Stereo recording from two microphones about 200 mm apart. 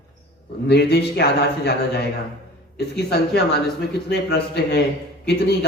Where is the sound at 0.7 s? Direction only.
55° left (ahead or behind).